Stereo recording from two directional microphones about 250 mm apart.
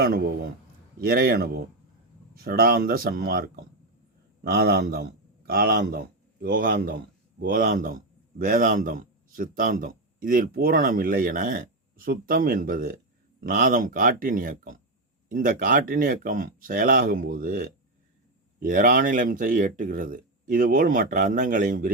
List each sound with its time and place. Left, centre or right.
0.0 s a man's voice: right